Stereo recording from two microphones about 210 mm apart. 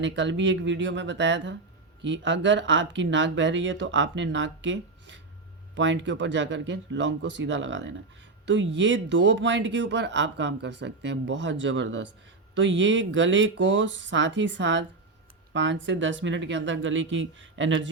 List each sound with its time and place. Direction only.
0.0 s speech: 60° right (ahead or behind)